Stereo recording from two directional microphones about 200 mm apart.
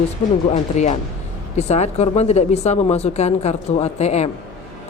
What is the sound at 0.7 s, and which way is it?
Speech, 35° left (ahead or behind).